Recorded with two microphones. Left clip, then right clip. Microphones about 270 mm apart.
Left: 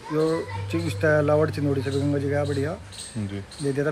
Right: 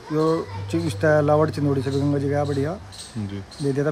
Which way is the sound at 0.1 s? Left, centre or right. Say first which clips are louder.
Right 2 dB; right.